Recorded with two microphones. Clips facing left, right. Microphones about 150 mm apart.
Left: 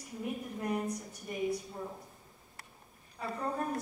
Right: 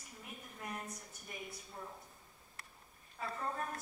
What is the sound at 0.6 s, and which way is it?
Speech, centre (ahead or behind).